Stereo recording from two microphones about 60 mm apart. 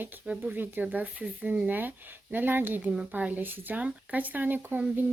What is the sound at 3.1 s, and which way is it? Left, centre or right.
A woman's voice, right.